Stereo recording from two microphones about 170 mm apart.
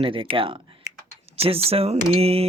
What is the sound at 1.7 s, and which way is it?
Speech, 35° right (ahead or behind).